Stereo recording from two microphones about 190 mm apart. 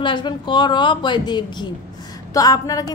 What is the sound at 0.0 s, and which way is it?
A woman's voice, 25° left (ahead or behind).